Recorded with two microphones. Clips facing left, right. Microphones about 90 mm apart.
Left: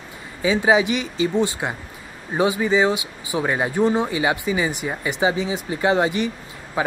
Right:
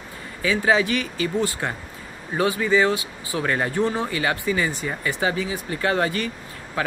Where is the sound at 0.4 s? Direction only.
20° left (ahead or behind).